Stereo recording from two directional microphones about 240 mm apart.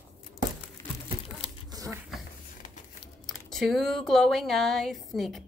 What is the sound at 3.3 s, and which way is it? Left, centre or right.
Speech, centre.